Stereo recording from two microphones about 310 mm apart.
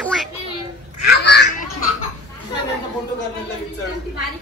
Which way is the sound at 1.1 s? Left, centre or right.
Left.